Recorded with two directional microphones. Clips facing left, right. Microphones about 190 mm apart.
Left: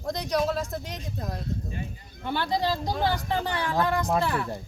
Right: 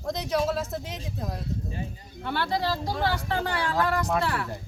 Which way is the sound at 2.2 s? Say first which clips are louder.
Left 1 dB; 15° left (ahead or behind).